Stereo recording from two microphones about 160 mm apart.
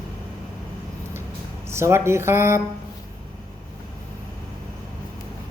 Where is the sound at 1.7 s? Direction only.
15° right (ahead or behind).